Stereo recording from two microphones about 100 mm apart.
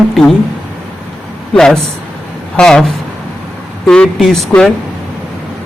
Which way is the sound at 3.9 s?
5° left (ahead or behind).